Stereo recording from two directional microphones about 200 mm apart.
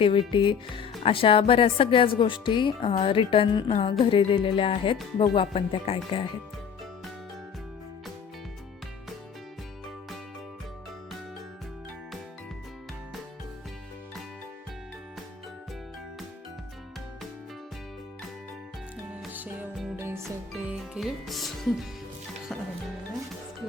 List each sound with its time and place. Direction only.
0.0 s speech: 25° left (ahead or behind)
19.1 s music: 5° right (ahead or behind)